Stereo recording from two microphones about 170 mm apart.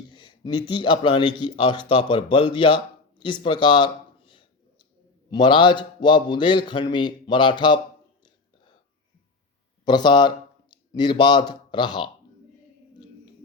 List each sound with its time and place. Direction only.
0.1 s a sound: 25° left (ahead or behind)
0.7 s a man's voice: 25° left (ahead or behind)
9.8 s speech: 25° left (ahead or behind)